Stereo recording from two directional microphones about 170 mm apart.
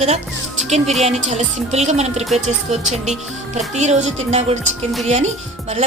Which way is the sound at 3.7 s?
40° right (ahead or behind).